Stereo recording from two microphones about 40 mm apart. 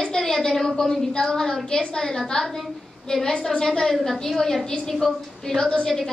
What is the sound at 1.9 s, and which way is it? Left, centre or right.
A woman's voice, centre.